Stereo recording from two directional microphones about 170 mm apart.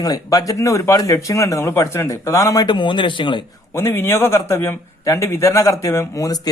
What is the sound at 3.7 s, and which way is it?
A man's voice, 15° left (ahead or behind).